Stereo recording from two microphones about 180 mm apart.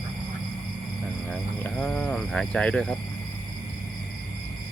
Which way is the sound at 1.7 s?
5° left (ahead or behind).